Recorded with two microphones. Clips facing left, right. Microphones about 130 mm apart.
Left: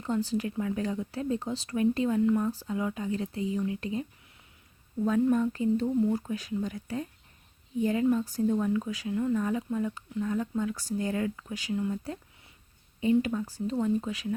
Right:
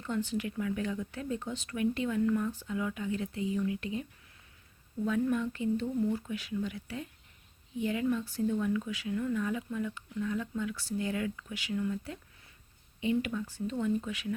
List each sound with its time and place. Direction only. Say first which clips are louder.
0.0 s speech: left 4 dB; 35° left (ahead or behind)
5.3 s speech: left 5 dB; 40° left (ahead or behind)